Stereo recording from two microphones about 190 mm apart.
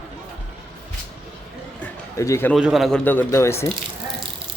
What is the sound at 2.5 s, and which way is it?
Speech, centre (ahead or behind).